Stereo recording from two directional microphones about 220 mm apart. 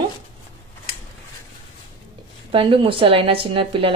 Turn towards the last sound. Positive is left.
turn(degrees=-25)  # may be behind; listen again after turning